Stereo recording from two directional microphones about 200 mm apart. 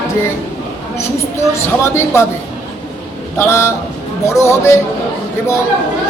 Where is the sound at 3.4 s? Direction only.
15° left (ahead or behind).